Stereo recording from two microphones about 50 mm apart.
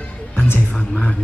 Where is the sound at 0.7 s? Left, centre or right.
Centre.